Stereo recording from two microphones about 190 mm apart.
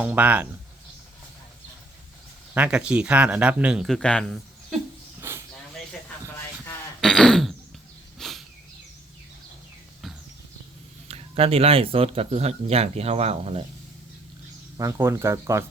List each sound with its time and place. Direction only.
0.0 s speech: 10° right (ahead or behind)
2.6 s speech: 5° right (ahead or behind)
5.2 s a sound: 10° right (ahead or behind)
7.0 s throat clearing: 5° left (ahead or behind)
8.2 s a sound: centre (ahead or behind)
11.1 s speech: 30° right (ahead or behind)
14.8 s speech: 15° right (ahead or behind)